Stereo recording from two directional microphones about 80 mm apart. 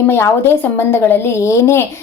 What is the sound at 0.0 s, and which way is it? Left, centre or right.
A woman's voice, left.